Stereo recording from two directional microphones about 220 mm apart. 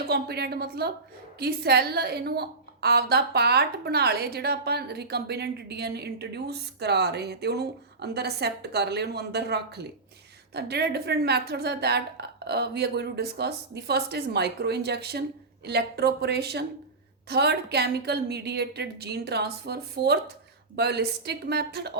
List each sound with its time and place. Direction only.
0.1 s a woman's voice: 45° right (ahead or behind)